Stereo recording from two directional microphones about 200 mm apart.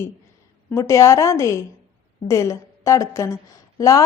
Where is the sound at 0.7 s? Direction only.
15° left (ahead or behind).